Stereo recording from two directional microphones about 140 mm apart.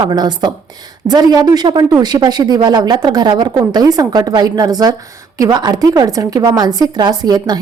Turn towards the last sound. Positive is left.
turn(degrees=-30)  # may be behind; listen again after turning